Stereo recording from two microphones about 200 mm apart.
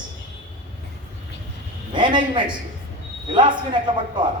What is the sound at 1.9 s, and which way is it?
A woman's voice, 25° right (ahead or behind).